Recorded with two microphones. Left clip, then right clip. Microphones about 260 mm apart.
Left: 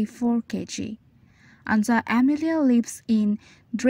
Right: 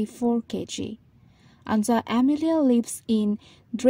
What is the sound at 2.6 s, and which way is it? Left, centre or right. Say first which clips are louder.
A woman's voice: even; left.